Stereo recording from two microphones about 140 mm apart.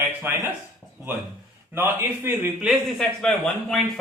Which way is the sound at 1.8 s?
15° right (ahead or behind).